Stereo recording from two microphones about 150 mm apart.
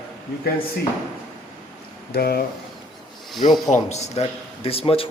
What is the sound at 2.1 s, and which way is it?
Speech, 90° left.